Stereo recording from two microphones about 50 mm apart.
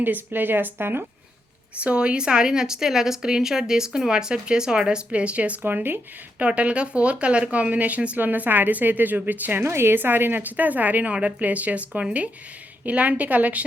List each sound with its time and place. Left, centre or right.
0.0 s speech: right
1.8 s a woman's voice: right
5.6 s speech: right
6.4 s speech: right
9.6 s speech: right
11.1 s speech: right